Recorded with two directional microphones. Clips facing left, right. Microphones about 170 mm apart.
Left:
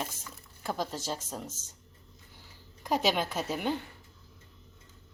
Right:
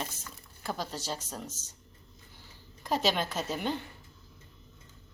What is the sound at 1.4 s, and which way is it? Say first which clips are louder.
Speech: even; 50° left (ahead or behind).